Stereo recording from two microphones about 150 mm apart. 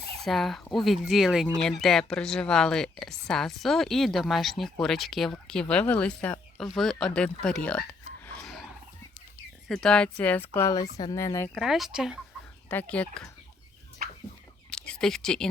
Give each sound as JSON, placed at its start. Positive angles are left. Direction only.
{"t": 0.3, "sound": "speech", "side_deg": 0}
{"t": 8.3, "sound": "a sound", "side_deg": 5}
{"t": 9.6, "sound": "speech", "side_deg": 5}
{"t": 11.5, "sound": "speech", "side_deg": 0}
{"t": 12.6, "sound": "speech", "side_deg": 10}
{"t": 14.0, "sound": "fowl", "side_deg": -75}
{"t": 14.7, "sound": "speech", "side_deg": 5}